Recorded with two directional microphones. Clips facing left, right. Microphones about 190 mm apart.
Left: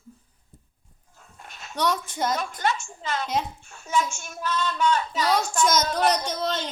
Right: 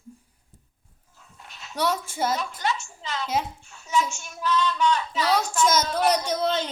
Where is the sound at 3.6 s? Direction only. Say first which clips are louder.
Even; 50° left (ahead or behind).